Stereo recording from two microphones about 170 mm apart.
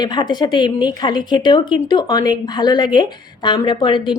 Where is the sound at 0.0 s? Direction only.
25° left (ahead or behind).